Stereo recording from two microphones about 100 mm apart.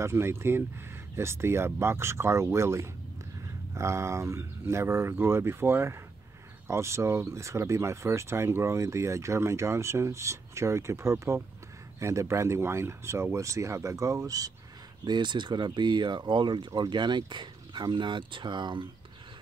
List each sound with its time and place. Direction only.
0.0 s speech: 25° right (ahead or behind)
15.0 s speech: 50° right (ahead or behind)